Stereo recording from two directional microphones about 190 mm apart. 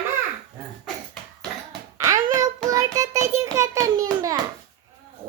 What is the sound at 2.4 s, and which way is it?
Child singing, 15° right (ahead or behind).